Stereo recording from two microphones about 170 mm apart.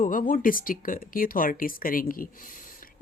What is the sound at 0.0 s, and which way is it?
Speech, 50° left (ahead or behind).